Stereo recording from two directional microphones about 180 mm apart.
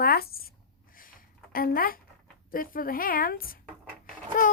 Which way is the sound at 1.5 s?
55° left (ahead or behind).